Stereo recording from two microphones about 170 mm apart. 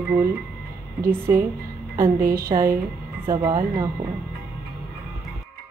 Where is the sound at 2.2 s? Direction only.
55° right (ahead or behind).